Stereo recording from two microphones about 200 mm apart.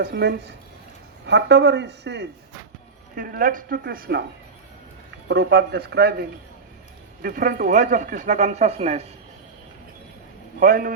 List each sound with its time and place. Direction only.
0.0 s a man's voice: 55° right (ahead or behind)
3.2 s a woman's voice: 45° right (ahead or behind)
5.3 s a woman's voice: 55° right (ahead or behind); by 9.0 s 30° right (ahead or behind)
10.6 s a woman's voice: 45° right (ahead or behind)